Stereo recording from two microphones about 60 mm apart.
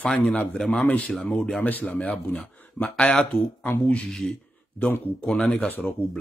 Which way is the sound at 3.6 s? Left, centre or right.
Left.